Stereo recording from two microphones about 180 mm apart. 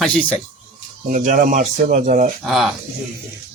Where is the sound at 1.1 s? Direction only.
45° right (ahead or behind).